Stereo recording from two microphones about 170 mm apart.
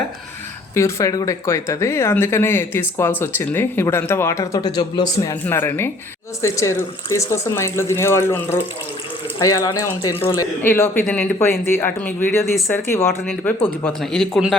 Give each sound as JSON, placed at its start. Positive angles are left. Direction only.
{"t": 0.7, "sound": "a man's voice", "side_deg": 15}